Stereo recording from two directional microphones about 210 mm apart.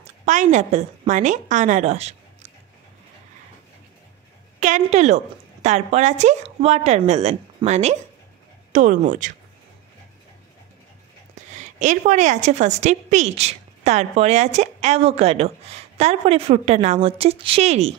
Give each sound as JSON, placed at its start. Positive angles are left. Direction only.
{"t": 0.0, "sound": "a woman's voice", "side_deg": -35}
{"t": 4.6, "sound": "a woman's voice", "side_deg": -35}
{"t": 11.5, "sound": "a woman's voice", "side_deg": -35}